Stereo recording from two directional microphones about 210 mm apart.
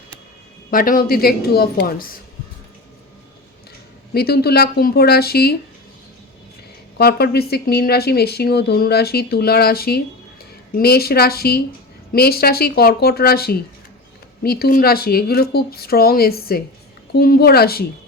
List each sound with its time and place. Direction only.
0.7 s speech: 40° left (ahead or behind)
4.1 s speech: 50° left (ahead or behind)
7.0 s speech: 50° left (ahead or behind)